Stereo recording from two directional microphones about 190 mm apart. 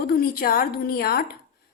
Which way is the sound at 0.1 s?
50° left (ahead or behind).